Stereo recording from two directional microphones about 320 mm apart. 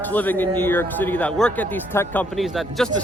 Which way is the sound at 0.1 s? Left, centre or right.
Centre.